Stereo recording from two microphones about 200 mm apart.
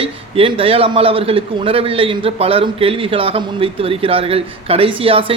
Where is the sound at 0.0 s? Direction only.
30° right (ahead or behind).